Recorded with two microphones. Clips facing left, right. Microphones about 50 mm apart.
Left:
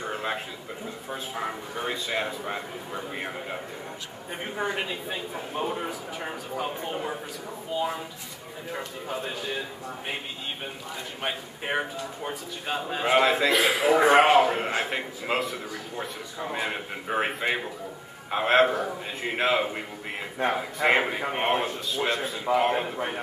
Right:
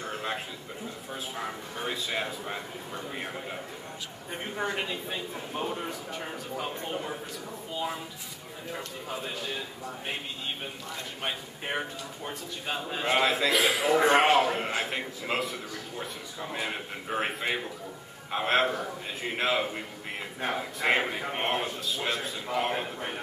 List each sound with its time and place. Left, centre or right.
0.0 s a sound: centre
1.1 s a man's voice: centre
11.2 s a man's voice: centre